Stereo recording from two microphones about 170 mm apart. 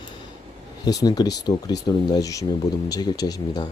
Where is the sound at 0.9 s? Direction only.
20° left (ahead or behind).